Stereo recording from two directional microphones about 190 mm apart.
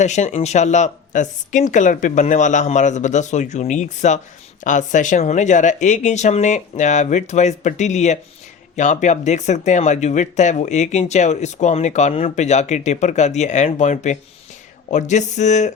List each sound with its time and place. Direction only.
0.0 s speech: 35° left (ahead or behind)